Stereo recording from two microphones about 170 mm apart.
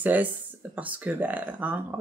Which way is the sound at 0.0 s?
10° right (ahead or behind).